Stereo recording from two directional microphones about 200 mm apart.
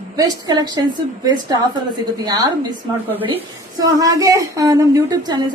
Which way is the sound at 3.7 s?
15° right (ahead or behind).